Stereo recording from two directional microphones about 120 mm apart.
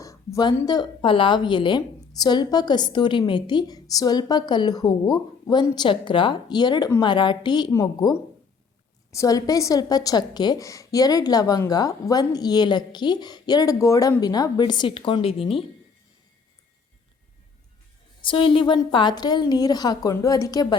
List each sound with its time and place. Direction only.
0.0 s a woman's voice: 25° left (ahead or behind)
9.1 s a woman's voice: 30° left (ahead or behind); by 15.6 s 50° left (ahead or behind)
18.2 s a woman's voice: 45° left (ahead or behind)